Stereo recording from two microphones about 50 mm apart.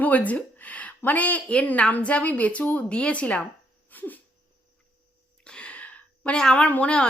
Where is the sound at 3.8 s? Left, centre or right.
Left.